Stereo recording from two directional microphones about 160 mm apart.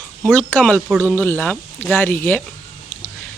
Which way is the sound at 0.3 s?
10° left (ahead or behind).